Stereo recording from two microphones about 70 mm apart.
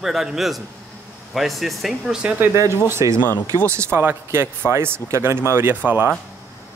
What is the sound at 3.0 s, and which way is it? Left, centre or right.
Speech, right.